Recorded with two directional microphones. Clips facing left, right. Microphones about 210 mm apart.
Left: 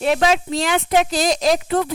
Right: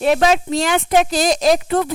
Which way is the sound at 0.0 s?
45° right (ahead or behind).